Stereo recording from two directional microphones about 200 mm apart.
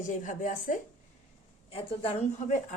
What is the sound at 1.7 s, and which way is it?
Speech, 30° left (ahead or behind).